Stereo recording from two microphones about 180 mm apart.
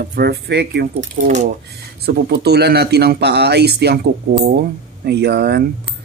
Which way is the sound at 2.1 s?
65° right (ahead or behind).